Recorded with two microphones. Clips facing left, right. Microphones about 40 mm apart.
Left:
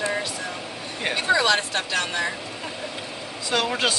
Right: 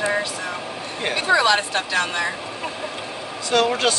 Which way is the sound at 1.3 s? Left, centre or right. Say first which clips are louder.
Right 6 dB; right.